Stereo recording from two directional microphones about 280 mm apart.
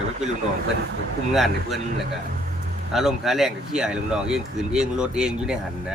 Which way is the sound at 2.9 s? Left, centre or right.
Centre.